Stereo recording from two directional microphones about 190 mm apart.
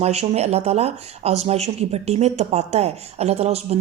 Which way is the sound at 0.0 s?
35° right (ahead or behind).